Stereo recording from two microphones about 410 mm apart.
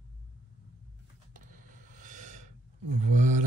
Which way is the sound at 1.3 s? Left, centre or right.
Centre.